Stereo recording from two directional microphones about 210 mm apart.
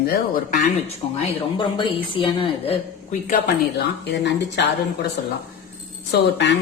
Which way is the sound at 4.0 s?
55° left (ahead or behind).